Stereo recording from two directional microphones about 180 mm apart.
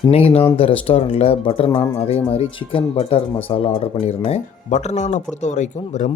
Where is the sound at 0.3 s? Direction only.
30° left (ahead or behind).